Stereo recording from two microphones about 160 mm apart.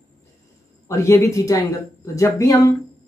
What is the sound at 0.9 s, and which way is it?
Speech, 20° left (ahead or behind).